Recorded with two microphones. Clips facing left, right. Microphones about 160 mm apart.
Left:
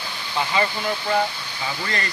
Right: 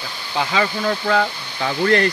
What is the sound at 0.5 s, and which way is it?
Speech, 75° right (ahead or behind).